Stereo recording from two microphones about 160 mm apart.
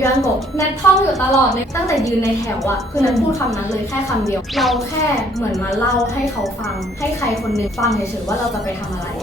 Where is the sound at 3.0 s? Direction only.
Centre (ahead or behind).